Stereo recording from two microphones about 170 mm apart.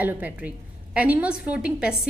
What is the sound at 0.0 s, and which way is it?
A woman's voice, 10° right (ahead or behind).